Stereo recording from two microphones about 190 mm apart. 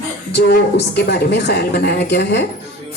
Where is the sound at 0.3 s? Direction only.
60° left (ahead or behind).